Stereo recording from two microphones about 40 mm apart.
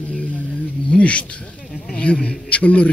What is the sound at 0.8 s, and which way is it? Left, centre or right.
A man's voice, left.